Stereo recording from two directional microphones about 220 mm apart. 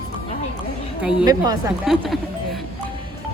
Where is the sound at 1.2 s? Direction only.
15° right (ahead or behind).